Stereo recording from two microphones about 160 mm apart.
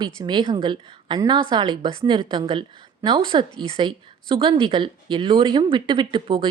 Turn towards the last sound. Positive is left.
turn(degrees=-30)  # may be behind; listen again after turning